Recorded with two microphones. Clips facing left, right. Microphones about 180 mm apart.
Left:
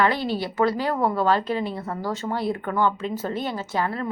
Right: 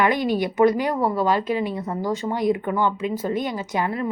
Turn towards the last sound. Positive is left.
turn(degrees=-15)  # may be behind; listen again after turning